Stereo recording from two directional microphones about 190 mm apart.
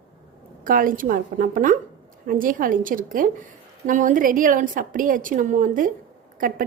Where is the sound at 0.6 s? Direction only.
45° right (ahead or behind).